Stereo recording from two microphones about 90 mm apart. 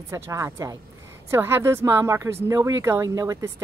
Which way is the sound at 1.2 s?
25° right (ahead or behind).